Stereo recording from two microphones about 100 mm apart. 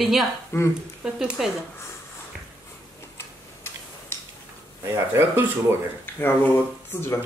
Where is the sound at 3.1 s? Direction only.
25° left (ahead or behind).